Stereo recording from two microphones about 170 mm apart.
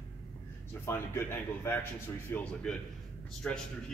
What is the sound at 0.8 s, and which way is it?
A man's voice, 15° left (ahead or behind).